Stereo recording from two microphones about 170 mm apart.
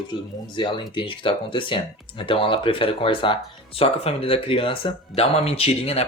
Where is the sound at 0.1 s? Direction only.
30° left (ahead or behind).